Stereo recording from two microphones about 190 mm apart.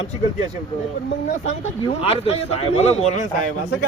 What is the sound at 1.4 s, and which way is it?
Speech, 30° left (ahead or behind).